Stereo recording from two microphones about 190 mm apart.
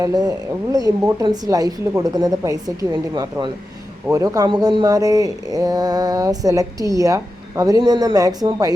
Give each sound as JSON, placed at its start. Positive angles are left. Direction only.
{"t": 0.0, "sound": "speech", "side_deg": -20}